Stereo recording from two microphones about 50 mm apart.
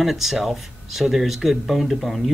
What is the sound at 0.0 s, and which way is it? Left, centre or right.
Speech, centre.